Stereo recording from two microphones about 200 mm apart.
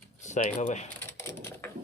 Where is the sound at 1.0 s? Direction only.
10° left (ahead or behind).